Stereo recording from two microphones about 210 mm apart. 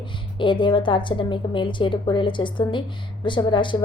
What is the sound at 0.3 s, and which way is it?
A woman's voice, 25° left (ahead or behind).